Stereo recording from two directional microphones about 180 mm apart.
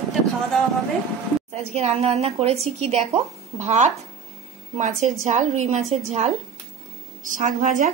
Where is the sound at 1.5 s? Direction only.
35° right (ahead or behind).